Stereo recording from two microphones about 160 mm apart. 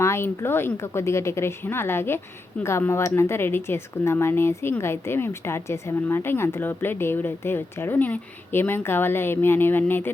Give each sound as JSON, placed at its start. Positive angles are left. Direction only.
{"t": 0.0, "sound": "speech", "side_deg": 15}